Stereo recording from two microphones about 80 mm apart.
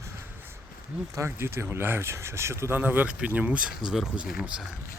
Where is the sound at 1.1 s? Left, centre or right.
Right.